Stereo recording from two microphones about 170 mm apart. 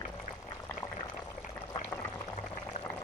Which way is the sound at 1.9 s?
10° left (ahead or behind).